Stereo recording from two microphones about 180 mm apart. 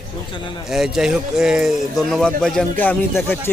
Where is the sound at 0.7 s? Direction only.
Centre (ahead or behind).